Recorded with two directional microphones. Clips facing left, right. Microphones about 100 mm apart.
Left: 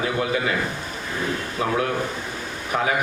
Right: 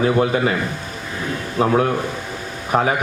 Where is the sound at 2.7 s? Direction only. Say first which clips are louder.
Right 5 dB; 35° right (ahead or behind).